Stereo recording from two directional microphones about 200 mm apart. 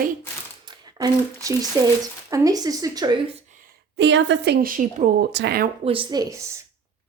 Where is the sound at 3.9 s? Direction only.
65° right (ahead or behind); by 5.1 s 40° right (ahead or behind).